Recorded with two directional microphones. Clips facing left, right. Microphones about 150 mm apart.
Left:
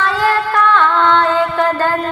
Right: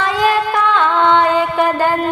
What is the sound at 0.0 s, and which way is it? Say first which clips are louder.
Music: right 1 dB; 15° right (ahead or behind).